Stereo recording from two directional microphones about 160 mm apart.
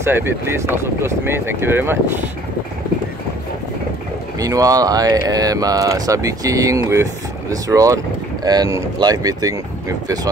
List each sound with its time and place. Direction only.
0.0 s speech: 15° right (ahead or behind)
4.4 s speech: 20° right (ahead or behind)